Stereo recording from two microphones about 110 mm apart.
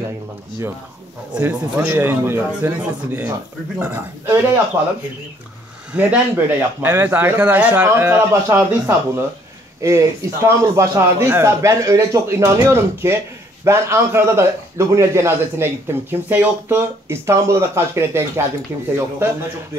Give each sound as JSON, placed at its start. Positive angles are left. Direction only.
{"t": 1.3, "sound": "speech", "side_deg": -10}
{"t": 1.8, "sound": "a man's voice", "side_deg": -20}
{"t": 4.8, "sound": "speech", "side_deg": -15}
{"t": 5.9, "sound": "a man's voice", "side_deg": -15}